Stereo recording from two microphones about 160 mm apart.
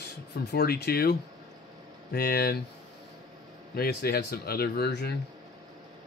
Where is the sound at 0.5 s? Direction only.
85° left.